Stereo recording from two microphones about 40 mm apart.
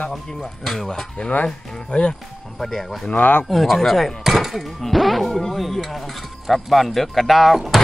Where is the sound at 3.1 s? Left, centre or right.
Left.